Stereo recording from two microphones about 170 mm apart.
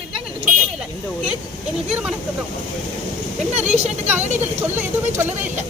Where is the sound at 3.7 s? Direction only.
40° right (ahead or behind).